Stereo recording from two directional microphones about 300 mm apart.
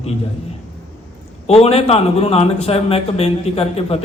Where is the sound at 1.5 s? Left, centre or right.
Centre.